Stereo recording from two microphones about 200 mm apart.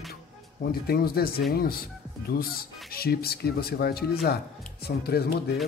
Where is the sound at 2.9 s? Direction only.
50° left (ahead or behind).